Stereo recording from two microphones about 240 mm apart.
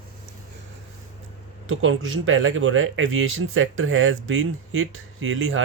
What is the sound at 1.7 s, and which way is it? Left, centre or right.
Speech, right.